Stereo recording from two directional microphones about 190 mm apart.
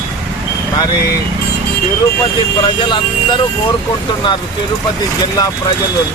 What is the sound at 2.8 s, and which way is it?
Speech, 25° left (ahead or behind).